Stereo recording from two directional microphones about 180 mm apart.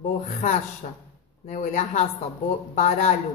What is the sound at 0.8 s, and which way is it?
A woman's voice, 45° left (ahead or behind).